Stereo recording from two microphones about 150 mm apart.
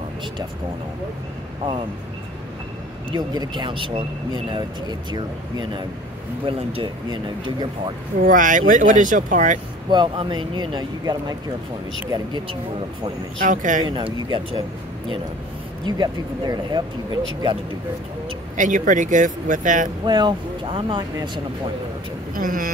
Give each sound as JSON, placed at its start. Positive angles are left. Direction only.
{"t": 3.1, "sound": "speech", "side_deg": -30}
{"t": 8.2, "sound": "speech", "side_deg": -60}
{"t": 9.8, "sound": "speech", "side_deg": -30}
{"t": 13.4, "sound": "speech", "side_deg": -60}
{"t": 13.8, "sound": "speech", "side_deg": -30}
{"t": 15.8, "sound": "speech", "side_deg": -30}
{"t": 18.6, "sound": "speech", "side_deg": -60}
{"t": 20.1, "sound": "speech", "side_deg": -30}
{"t": 22.3, "sound": "speech", "side_deg": -70}